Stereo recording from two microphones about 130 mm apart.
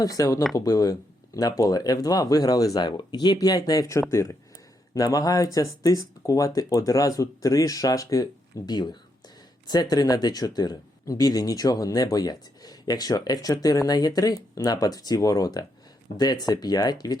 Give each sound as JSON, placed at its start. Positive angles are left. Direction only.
{"t": 0.0, "sound": "speech", "side_deg": 30}